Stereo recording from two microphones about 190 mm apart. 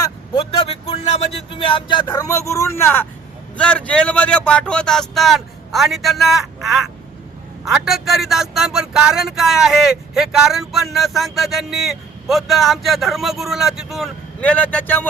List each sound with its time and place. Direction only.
0.3 s a man's voice: 30° left (ahead or behind); by 15.0 s 10° left (ahead or behind)